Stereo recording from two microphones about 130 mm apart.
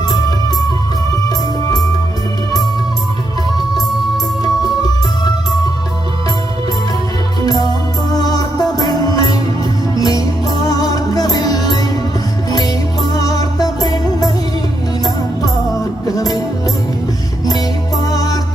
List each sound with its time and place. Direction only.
0.1 s music: 30° left (ahead or behind)
8.1 s music: 30° left (ahead or behind)
15.7 s music: 25° left (ahead or behind)